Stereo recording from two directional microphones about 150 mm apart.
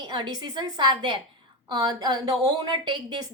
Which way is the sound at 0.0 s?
30° right (ahead or behind).